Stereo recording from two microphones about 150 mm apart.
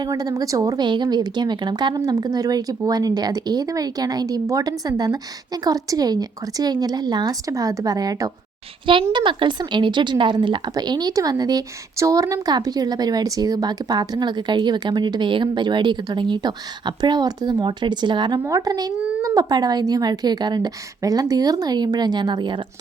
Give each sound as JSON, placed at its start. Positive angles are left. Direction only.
{"t": 0.0, "sound": "a woman's voice", "side_deg": -25}